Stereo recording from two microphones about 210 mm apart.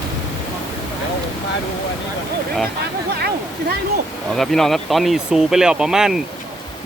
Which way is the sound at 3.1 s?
50° right (ahead or behind).